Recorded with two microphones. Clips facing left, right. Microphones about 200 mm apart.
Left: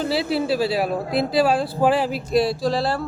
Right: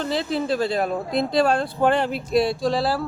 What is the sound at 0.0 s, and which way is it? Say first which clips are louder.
Speech: left 2 dB; 5° left (ahead or behind).